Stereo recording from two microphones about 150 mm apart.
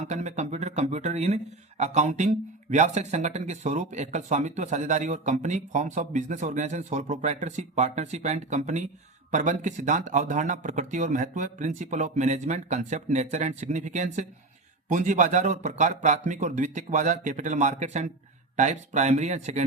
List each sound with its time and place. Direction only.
0.0 s speech: 50° right (ahead or behind)